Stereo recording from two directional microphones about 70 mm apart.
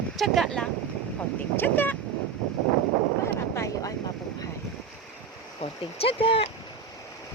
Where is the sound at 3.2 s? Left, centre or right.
Left.